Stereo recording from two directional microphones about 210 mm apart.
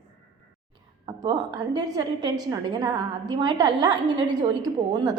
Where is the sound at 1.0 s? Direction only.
20° right (ahead or behind).